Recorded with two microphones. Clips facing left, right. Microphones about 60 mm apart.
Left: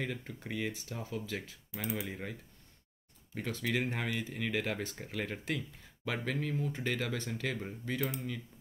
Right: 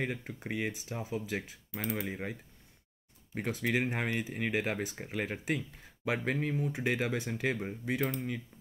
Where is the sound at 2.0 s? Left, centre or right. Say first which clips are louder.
Right 3 dB; centre.